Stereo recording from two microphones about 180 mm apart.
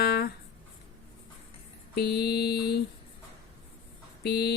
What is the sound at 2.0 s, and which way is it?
Mantra, 65° left (ahead or behind).